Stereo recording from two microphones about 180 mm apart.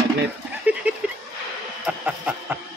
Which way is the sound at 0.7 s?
10° right (ahead or behind).